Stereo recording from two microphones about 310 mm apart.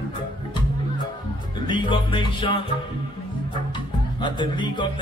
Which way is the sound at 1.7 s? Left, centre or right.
Centre.